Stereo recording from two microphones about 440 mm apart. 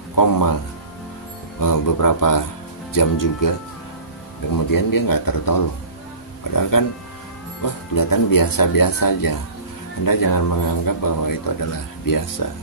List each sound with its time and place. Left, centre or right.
0.1 s speech: left
1.6 s speech: left
4.6 s speech: left